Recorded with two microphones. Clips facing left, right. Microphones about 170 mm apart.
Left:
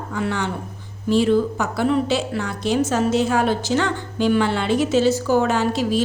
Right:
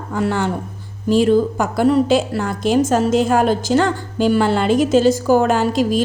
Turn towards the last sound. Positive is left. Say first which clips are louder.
# right 3 dB
turn(degrees=-45)  # may be behind; listen again after turning